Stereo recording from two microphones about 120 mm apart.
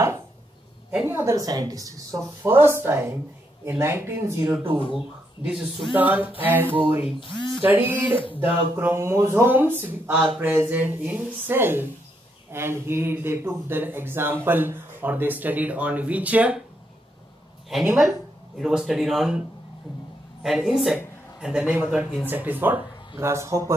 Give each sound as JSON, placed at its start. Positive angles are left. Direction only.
{"t": 0.9, "sound": "a woman's voice", "side_deg": -20}
{"t": 4.9, "sound": "speech", "side_deg": -5}
{"t": 5.9, "sound": "speech", "side_deg": -15}
{"t": 17.7, "sound": "speech", "side_deg": 0}
{"t": 20.4, "sound": "speech", "side_deg": 0}